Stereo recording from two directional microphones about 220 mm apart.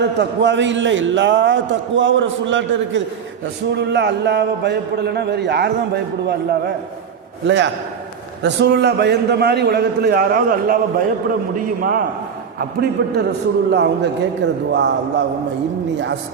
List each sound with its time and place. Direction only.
0.2 s a man's voice: 55° right (ahead or behind)